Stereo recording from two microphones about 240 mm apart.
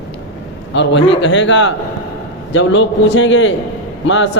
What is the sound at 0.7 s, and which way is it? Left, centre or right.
Speech, left.